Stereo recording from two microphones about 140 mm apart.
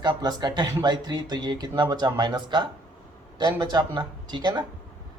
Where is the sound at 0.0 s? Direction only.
30° right (ahead or behind).